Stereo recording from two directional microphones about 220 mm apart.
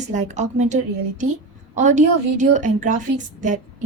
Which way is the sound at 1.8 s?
35° right (ahead or behind).